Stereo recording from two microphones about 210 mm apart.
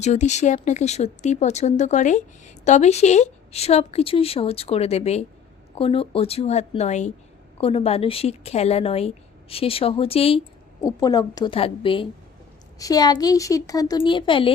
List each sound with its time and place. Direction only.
0.0 s a woman's voice: 35° left (ahead or behind)
10.8 s a woman's voice: 15° left (ahead or behind)